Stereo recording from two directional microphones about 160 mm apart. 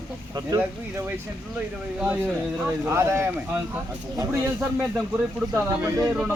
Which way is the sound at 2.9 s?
15° right (ahead or behind).